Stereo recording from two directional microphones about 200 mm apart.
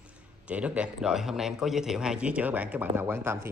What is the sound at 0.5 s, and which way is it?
A man's voice, 5° right (ahead or behind).